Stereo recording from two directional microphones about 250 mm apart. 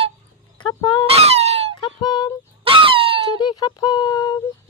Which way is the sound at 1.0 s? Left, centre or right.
Right.